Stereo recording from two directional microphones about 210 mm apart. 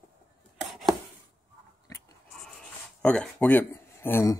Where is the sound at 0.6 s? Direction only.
Centre (ahead or behind).